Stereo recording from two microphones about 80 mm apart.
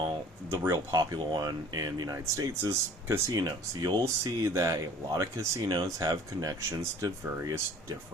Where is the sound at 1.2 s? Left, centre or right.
Right.